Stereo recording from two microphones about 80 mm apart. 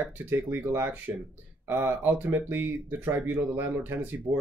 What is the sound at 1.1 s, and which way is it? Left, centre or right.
Speech, right.